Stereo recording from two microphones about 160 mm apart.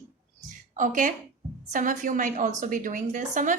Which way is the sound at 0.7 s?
55° right (ahead or behind).